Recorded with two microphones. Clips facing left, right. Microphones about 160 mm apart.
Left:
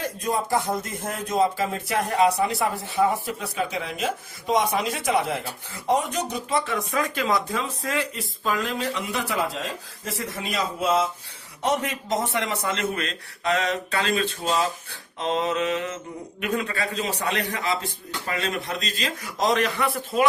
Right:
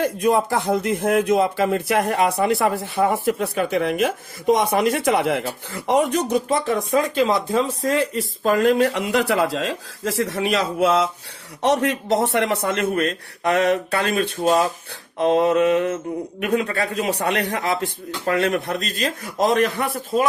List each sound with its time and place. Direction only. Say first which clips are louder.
0.0 s speech: right 8 dB; 65° right (ahead or behind)
6.5 s speech: right 6 dB; 30° right (ahead or behind); by 19.3 s 60° right (ahead or behind)
19.5 s speech: right 4 dB; 45° right (ahead or behind)